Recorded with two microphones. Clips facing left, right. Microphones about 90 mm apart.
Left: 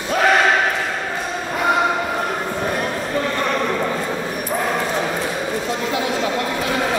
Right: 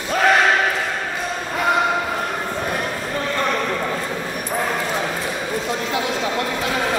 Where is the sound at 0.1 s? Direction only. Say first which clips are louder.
Even; centre (ahead or behind).